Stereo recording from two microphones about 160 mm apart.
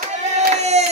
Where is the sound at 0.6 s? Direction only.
45° right (ahead or behind).